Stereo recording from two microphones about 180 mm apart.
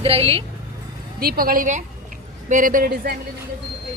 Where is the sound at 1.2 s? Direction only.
55° right (ahead or behind).